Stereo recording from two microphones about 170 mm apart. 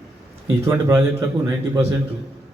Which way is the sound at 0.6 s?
15° right (ahead or behind).